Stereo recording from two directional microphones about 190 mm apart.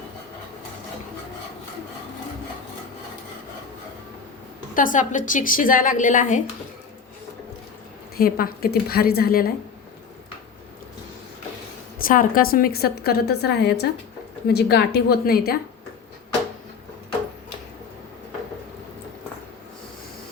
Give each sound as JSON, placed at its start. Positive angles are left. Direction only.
{"t": 4.7, "sound": "a woman's voice", "side_deg": 45}
{"t": 8.2, "sound": "a woman's voice", "side_deg": 50}
{"t": 11.9, "sound": "a woman's voice", "side_deg": 50}